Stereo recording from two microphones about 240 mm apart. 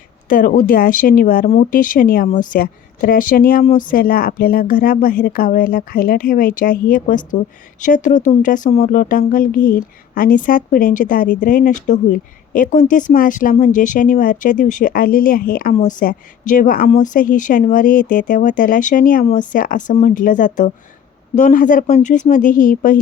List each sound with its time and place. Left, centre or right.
0.3 s speech: left